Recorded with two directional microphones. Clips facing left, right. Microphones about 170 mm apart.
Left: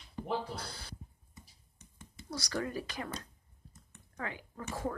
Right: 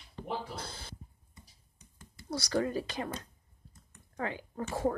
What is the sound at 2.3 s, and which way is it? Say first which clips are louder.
Speech: right 5 dB; 30° right (ahead or behind).